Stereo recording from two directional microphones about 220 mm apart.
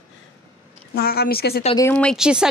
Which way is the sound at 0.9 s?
45° left (ahead or behind).